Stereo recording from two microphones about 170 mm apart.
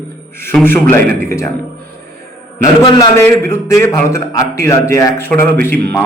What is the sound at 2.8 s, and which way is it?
Speech, 25° left (ahead or behind).